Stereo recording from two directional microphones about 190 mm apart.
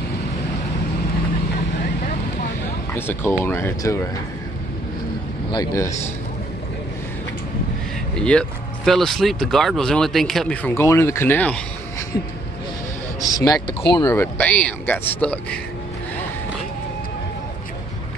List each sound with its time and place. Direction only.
2.9 s speech: 10° left (ahead or behind)
5.5 s speech: 20° left (ahead or behind)
8.2 s speech: 5° left (ahead or behind)
13.2 s speech: 20° left (ahead or behind)
14.0 s speech: 10° left (ahead or behind)